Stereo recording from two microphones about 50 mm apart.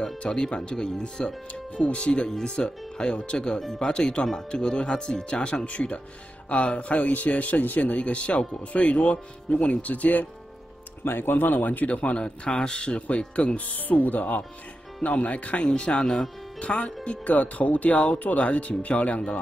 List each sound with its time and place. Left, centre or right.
0.2 s speech: centre
11.1 s speech: left
12.0 s speech: left
13.6 s speech: left